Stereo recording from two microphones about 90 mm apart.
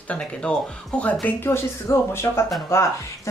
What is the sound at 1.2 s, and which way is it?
A woman's voice, 25° left (ahead or behind).